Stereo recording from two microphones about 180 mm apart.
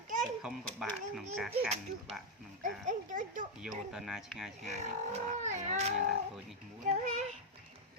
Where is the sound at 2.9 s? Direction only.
45° right (ahead or behind).